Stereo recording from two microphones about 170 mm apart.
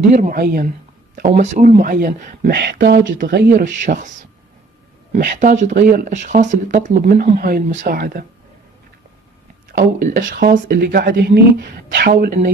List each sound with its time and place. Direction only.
0.1 s speech: 45° right (ahead or behind)
0.4 s speech: 65° right (ahead or behind)
1.3 s a woman's voice: 40° right (ahead or behind); by 3.6 s 70° right (ahead or behind)
3.6 s speech: 50° right (ahead or behind)
5.1 s speech: 50° right (ahead or behind)
9.7 s a woman's voice: 55° right (ahead or behind); by 11.4 s 75° right (ahead or behind)
11.9 s speech: 60° right (ahead or behind)